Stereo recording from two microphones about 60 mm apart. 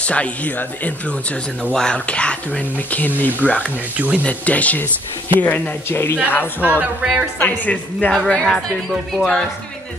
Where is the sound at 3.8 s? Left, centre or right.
Right.